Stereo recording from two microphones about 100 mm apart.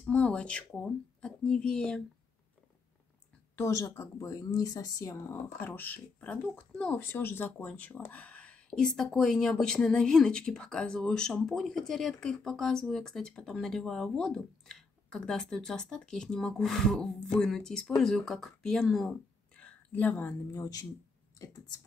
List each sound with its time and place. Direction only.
0.0 s speech: 10° left (ahead or behind)
3.5 s speech: 30° left (ahead or behind); by 19.1 s centre (ahead or behind)
19.5 s a sound: 15° left (ahead or behind)
20.5 s speech: 35° left (ahead or behind)